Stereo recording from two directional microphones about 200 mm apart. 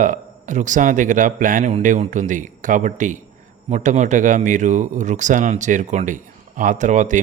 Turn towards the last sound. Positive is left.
turn(degrees=-40)  # may be behind; listen again after turning